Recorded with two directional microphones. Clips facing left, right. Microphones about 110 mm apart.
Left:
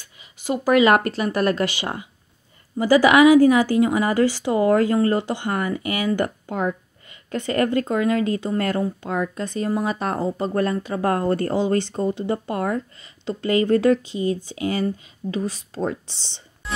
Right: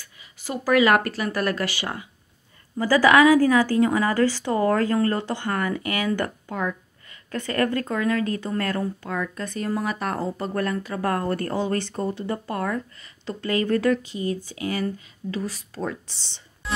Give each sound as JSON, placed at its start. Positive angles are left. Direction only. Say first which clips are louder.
{"t": 0.0, "sound": "speech", "louder": "left 5 dB", "side_deg": 20}
{"t": 6.4, "sound": "a woman's voice", "louder": "left 4 dB", "side_deg": 25}